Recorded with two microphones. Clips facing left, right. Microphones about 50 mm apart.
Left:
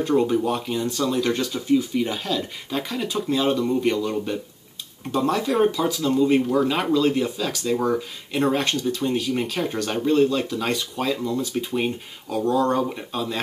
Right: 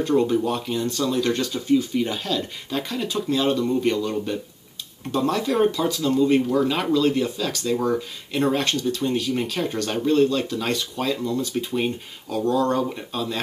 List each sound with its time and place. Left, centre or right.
0.0 s speech: centre